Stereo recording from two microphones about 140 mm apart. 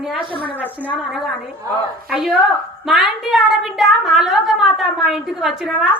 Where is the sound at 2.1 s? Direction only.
5° right (ahead or behind).